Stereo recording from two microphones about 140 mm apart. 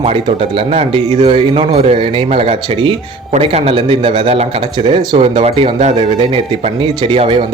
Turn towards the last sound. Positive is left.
turn(degrees=-45)  # may be behind; listen again after turning